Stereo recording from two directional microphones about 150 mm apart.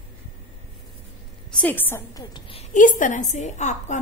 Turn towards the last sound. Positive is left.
turn(degrees=50)  # may be behind; listen again after turning